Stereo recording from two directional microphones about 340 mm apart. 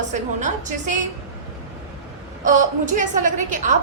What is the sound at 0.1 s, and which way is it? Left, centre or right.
Speech, right.